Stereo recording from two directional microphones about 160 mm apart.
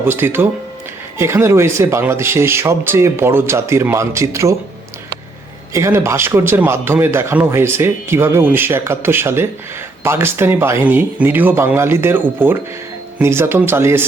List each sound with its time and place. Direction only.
0.0 s speech: 15° right (ahead or behind)
5.7 s speech: 15° right (ahead or behind)